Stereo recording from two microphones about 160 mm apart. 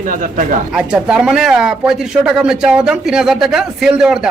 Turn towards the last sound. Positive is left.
turn(degrees=-5)  # may be behind; listen again after turning